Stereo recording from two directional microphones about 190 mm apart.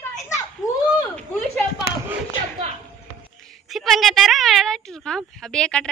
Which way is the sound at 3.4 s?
Centre (ahead or behind).